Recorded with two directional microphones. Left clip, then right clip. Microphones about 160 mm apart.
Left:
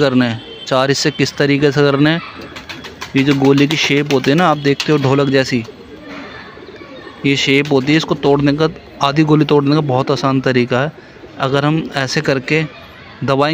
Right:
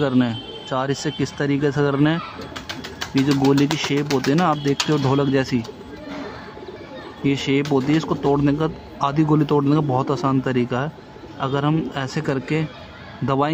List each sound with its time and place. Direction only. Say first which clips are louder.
0.0 s a man's voice: left 7 dB; 15° left (ahead or behind)
7.2 s a man's voice: left 7 dB; 15° left (ahead or behind)